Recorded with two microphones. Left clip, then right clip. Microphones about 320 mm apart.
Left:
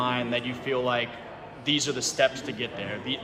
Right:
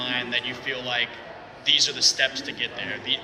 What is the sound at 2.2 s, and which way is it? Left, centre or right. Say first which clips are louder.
A man's voice: even; centre.